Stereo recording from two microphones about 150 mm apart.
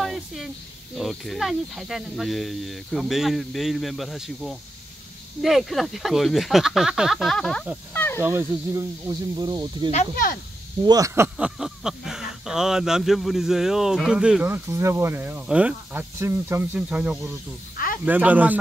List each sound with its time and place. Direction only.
0.0 s a sound: centre (ahead or behind)
0.9 s speech: centre (ahead or behind)
7.9 s snake: 10° left (ahead or behind)
8.2 s speech: 15° right (ahead or behind)
9.5 s speech: 30° right (ahead or behind)
10.9 s speech: 20° right (ahead or behind)
11.3 s speech: 5° right (ahead or behind)